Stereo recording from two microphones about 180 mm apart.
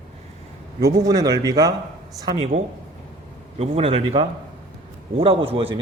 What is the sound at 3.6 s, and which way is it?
A man's voice, 35° right (ahead or behind).